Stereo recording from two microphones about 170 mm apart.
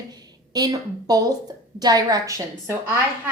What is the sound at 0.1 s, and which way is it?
A woman's voice, 25° right (ahead or behind).